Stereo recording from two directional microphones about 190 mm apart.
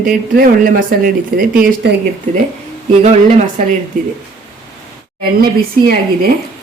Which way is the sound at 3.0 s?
40° right (ahead or behind).